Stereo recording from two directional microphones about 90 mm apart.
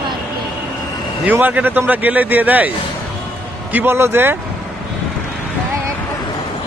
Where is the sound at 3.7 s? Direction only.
25° right (ahead or behind).